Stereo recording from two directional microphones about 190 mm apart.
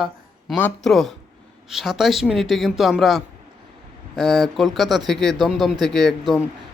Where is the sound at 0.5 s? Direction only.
5° left (ahead or behind).